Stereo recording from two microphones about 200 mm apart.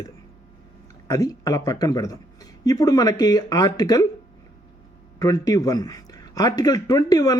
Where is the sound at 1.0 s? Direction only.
15° left (ahead or behind).